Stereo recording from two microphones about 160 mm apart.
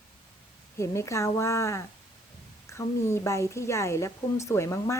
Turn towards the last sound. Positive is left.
turn(degrees=15)  # may be behind; listen again after turning